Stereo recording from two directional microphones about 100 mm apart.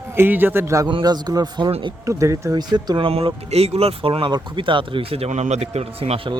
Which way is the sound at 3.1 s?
75° right (ahead or behind).